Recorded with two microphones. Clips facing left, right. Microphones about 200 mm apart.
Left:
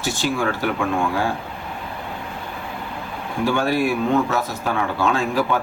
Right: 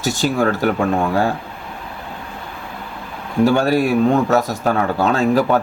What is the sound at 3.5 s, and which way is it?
Speech, 40° right (ahead or behind).